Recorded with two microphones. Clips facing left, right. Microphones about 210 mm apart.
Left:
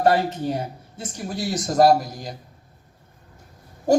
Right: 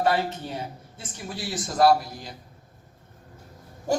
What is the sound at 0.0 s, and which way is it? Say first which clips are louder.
Speech: left 5 dB; 40° left (ahead or behind).